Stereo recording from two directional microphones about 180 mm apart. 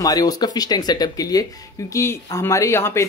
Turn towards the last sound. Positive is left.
turn(degrees=15)  # may be behind; listen again after turning